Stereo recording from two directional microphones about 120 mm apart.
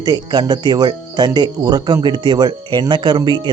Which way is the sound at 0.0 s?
35° right (ahead or behind).